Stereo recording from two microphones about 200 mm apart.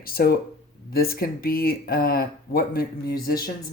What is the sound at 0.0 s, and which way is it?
Speech, 50° left (ahead or behind).